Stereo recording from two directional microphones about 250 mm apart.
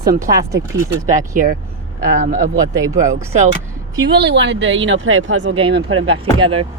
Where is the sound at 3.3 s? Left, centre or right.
Right.